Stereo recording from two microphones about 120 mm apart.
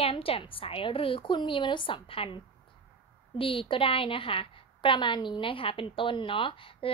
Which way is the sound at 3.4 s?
50° left (ahead or behind).